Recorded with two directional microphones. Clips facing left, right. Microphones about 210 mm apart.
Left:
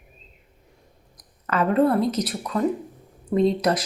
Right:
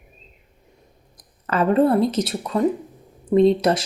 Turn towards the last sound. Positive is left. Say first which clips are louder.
# right 4 dB
turn(degrees=-30)  # may be behind; listen again after turning